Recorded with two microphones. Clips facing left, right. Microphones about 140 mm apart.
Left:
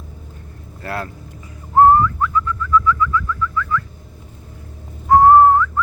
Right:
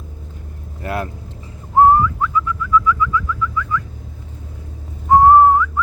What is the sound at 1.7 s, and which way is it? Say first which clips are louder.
Bird: even; 10° right (ahead or behind).